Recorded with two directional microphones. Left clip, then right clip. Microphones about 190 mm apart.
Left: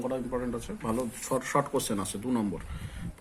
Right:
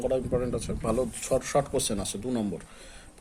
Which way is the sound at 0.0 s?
60° right (ahead or behind).